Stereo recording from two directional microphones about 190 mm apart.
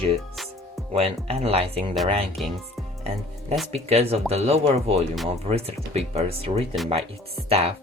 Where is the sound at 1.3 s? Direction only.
30° right (ahead or behind).